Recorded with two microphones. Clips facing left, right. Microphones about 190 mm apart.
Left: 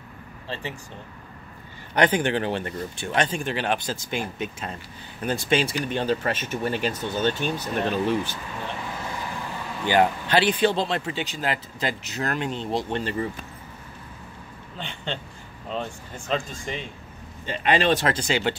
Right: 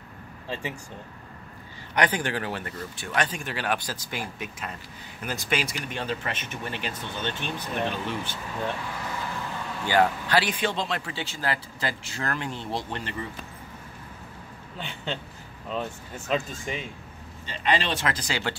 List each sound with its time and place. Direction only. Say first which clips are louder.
0.5 s speech: even; 10° right (ahead or behind)
2.0 s speech: left 5 dB; 25° left (ahead or behind); by 8.4 s 45° left (ahead or behind)
9.8 s speech: left 2 dB; 20° left (ahead or behind)
14.8 s speech: left 1 dB; 5° right (ahead or behind)
17.5 s speech: left 5 dB; 50° left (ahead or behind)
18.0 s speech: left 5 dB; 25° left (ahead or behind)